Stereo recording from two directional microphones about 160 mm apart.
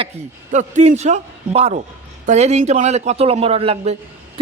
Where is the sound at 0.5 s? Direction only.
45° right (ahead or behind).